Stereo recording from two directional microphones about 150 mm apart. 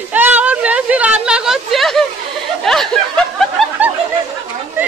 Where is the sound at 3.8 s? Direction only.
10° right (ahead or behind).